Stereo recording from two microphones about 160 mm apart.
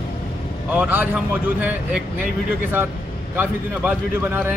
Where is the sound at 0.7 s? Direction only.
10° right (ahead or behind).